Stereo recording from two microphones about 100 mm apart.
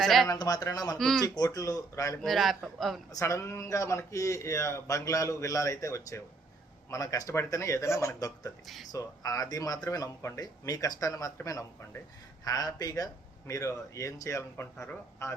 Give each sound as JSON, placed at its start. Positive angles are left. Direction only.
{"t": 0.0, "sound": "speech", "side_deg": 0}
{"t": 0.3, "sound": "a man's voice", "side_deg": 40}
{"t": 0.9, "sound": "speech", "side_deg": 5}
{"t": 1.4, "sound": "a man's voice", "side_deg": 35}
{"t": 2.2, "sound": "speech", "side_deg": 0}
{"t": 3.1, "sound": "a man's voice", "side_deg": 30}
{"t": 8.6, "sound": "speech", "side_deg": 0}
{"t": 8.9, "sound": "a man's voice", "side_deg": 35}